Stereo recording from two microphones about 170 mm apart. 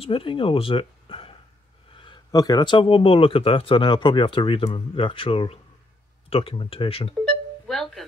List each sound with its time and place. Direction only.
0.0 s speech: 30° left (ahead or behind)
7.6 s music: centre (ahead or behind)